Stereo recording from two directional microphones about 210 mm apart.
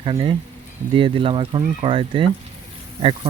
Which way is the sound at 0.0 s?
25° right (ahead or behind).